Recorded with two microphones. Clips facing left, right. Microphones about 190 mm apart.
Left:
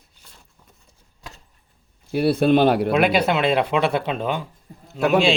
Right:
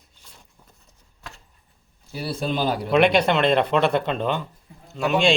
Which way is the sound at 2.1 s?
60° left (ahead or behind).